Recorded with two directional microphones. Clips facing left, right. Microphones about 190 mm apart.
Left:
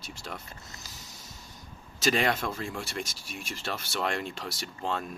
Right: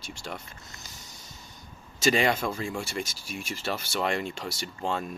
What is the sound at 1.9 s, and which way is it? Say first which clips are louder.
Speech: right 3 dB; centre (ahead or behind).